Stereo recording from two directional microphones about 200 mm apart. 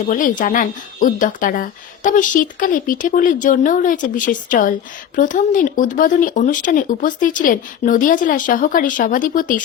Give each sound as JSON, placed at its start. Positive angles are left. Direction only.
{"t": 0.1, "sound": "speech", "side_deg": 40}